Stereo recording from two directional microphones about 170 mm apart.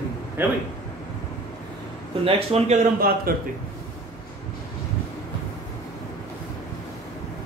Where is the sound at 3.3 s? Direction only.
60° right (ahead or behind).